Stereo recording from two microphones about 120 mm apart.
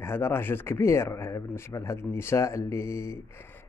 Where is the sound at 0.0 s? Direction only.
20° left (ahead or behind).